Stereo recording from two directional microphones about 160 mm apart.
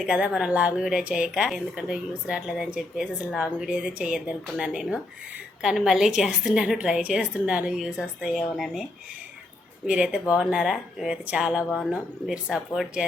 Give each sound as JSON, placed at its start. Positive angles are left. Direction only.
{"t": 0.0, "sound": "a woman's voice", "side_deg": -5}
{"t": 9.8, "sound": "speech", "side_deg": -5}